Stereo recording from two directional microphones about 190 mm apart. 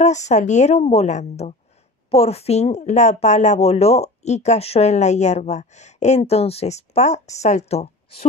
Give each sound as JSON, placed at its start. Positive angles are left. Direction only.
{"t": 0.0, "sound": "speech", "side_deg": 40}